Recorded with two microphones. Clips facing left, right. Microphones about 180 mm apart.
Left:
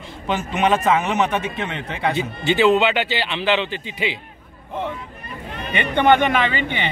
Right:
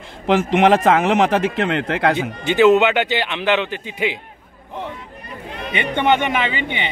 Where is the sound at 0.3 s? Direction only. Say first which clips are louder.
Right 6 dB; 90° right.